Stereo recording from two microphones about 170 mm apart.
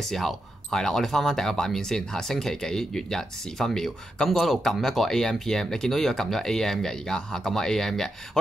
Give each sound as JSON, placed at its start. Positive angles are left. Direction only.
{"t": 0.1, "sound": "speech", "side_deg": 0}